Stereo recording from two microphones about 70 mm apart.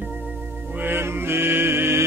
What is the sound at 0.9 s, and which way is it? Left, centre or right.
Mantra, right.